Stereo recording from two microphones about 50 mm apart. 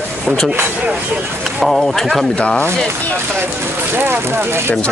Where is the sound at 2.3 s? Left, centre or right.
Left.